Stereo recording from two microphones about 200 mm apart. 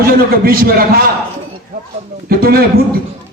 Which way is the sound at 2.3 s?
50° right (ahead or behind).